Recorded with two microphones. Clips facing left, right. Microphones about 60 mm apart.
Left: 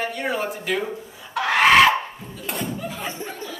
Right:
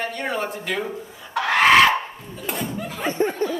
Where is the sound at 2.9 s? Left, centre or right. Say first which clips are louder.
Right 8 dB; right.